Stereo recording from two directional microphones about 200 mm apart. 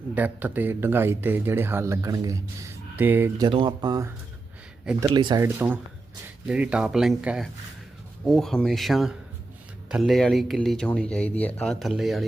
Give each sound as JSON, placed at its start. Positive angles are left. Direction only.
{"t": 0.1, "sound": "speech", "side_deg": -10}
{"t": 3.4, "sound": "speech", "side_deg": -25}
{"t": 5.4, "sound": "speech", "side_deg": -10}